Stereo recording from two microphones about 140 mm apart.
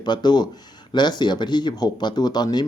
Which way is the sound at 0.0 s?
30° left (ahead or behind).